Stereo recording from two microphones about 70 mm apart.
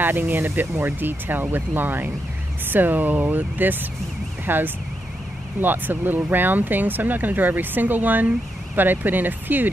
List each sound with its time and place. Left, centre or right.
0.0 s speech: right